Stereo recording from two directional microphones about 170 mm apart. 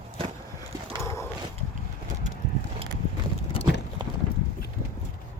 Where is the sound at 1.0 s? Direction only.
15° left (ahead or behind).